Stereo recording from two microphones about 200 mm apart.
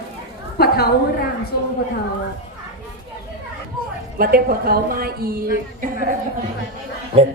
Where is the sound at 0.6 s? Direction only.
50° left (ahead or behind).